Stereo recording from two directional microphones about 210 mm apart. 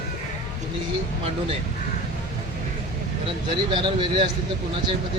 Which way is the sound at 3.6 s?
25° right (ahead or behind).